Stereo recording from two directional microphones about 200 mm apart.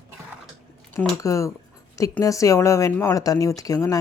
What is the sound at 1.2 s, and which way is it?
Speech, 15° left (ahead or behind).